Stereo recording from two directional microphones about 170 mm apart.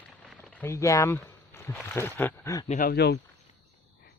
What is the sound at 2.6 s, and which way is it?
Speech, 45° left (ahead or behind).